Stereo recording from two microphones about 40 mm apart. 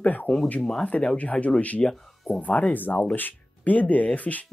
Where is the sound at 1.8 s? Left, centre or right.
Centre.